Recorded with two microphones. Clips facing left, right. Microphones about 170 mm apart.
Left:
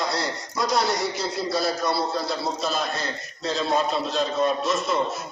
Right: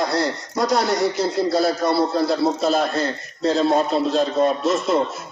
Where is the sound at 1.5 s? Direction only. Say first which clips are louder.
Right 5 dB; 55° right (ahead or behind).